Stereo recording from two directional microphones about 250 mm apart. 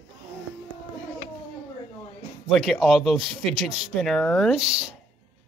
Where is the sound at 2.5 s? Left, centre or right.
Centre.